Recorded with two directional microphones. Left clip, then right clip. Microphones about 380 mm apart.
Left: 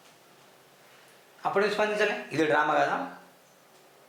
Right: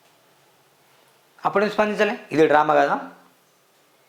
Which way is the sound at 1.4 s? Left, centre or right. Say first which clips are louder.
Right 5 dB; right.